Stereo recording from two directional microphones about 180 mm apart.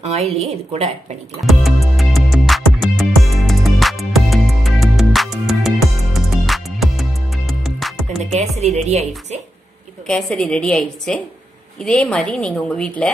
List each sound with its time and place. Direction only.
0.1 s a woman's voice: 35° right (ahead or behind)
1.4 s music: centre (ahead or behind)
8.3 s a woman's voice: 40° right (ahead or behind)
10.0 s a woman's voice: 5° left (ahead or behind)